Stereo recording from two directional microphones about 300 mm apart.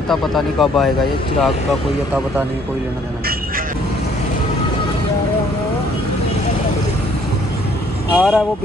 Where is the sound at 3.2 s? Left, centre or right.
Right.